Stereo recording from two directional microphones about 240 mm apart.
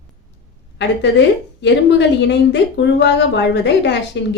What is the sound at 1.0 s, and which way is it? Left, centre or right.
A woman's voice, left.